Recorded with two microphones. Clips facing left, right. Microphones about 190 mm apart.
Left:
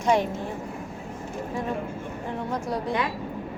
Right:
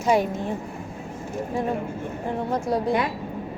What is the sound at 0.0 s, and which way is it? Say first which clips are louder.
Speech: right 2 dB; 5° right (ahead or behind).